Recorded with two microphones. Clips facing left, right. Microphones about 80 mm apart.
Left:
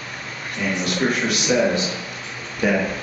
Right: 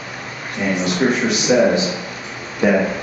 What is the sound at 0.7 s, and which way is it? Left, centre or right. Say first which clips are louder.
A man's voice: right 4 dB; centre.